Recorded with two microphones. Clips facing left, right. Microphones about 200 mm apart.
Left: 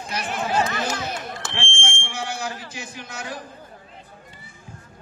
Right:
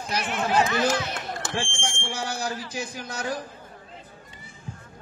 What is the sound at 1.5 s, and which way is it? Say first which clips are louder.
Speech: right 1 dB; 40° right (ahead or behind).